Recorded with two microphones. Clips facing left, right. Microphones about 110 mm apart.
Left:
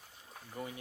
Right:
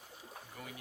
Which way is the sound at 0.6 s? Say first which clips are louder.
Left 8 dB; 25° left (ahead or behind).